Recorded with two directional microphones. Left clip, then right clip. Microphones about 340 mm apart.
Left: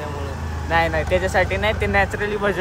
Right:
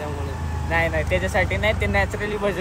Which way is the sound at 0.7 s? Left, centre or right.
Centre.